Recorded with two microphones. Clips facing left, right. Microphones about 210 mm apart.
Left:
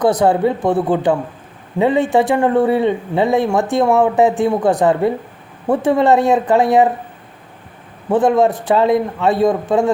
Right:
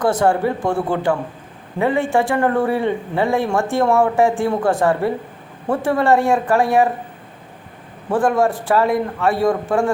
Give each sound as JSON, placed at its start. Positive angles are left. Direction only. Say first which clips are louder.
{"t": 0.0, "sound": "speech", "louder": "left 3 dB", "side_deg": 20}
{"t": 8.1, "sound": "speech", "louder": "left 4 dB", "side_deg": 20}